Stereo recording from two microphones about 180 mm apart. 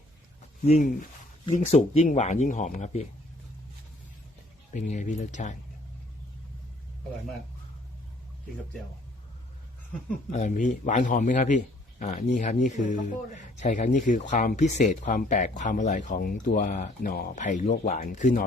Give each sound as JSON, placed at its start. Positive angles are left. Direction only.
{"t": 0.6, "sound": "a man's voice", "side_deg": 45}
{"t": 4.7, "sound": "speech", "side_deg": 45}
{"t": 10.3, "sound": "a man's voice", "side_deg": 40}